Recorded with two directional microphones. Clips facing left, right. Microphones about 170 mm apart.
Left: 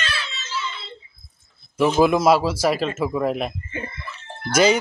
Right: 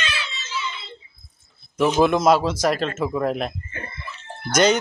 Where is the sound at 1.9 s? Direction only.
5° left (ahead or behind).